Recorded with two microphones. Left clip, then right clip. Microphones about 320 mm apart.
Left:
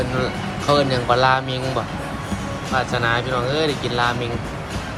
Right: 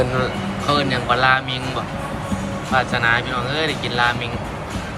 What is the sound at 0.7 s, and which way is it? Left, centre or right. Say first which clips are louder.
Speech: left 1 dB; centre.